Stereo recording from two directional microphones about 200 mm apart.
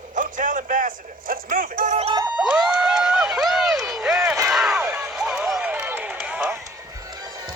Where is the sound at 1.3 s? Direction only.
45° right (ahead or behind).